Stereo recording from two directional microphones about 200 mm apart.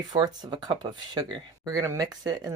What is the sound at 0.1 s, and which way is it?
Speech, 20° right (ahead or behind).